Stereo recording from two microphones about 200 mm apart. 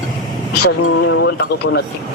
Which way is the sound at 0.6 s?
70° left (ahead or behind).